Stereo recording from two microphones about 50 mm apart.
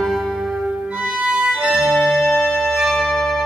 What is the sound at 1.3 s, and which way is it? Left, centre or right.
Organ, right.